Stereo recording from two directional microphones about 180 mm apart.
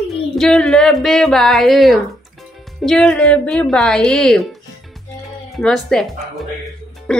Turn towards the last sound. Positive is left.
turn(degrees=5)  # may be behind; listen again after turning